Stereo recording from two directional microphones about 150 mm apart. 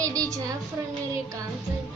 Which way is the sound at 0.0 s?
20° right (ahead or behind).